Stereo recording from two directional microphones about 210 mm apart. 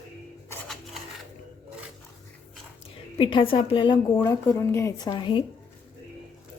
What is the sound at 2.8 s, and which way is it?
A woman's voice, 25° left (ahead or behind).